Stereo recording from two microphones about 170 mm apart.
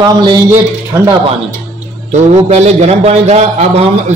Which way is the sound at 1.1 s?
35° right (ahead or behind).